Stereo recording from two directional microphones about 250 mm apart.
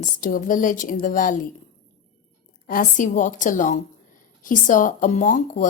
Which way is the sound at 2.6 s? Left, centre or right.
Left.